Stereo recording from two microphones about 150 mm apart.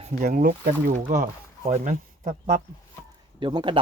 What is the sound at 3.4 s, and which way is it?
Speech, 30° right (ahead or behind).